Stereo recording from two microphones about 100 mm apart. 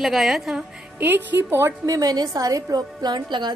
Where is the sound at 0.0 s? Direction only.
Centre (ahead or behind).